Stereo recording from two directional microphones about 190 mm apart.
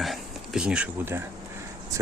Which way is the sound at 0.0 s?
Centre (ahead or behind).